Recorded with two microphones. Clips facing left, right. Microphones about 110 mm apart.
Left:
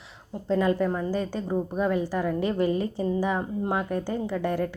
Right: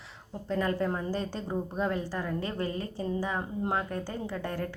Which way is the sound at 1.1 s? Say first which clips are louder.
Left 5 dB; 5° left (ahead or behind).